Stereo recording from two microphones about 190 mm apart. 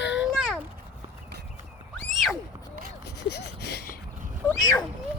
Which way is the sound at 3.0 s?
60° left (ahead or behind).